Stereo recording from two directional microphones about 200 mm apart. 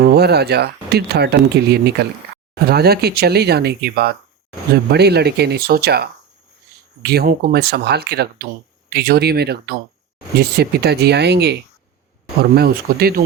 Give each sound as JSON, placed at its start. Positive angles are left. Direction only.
{"t": 0.0, "sound": "speech", "side_deg": -55}